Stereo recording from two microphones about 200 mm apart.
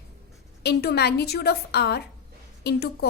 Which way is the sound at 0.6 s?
55° left (ahead or behind).